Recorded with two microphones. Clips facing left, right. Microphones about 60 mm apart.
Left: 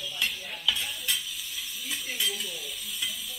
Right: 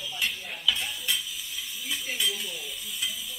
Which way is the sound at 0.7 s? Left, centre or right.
Centre.